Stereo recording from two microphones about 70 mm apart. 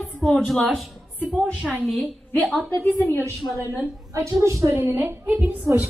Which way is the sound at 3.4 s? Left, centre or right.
Left.